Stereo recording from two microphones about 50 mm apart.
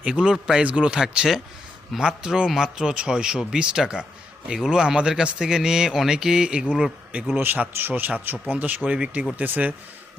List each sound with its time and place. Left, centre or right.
0.0 s speech: centre
7.3 s speech: right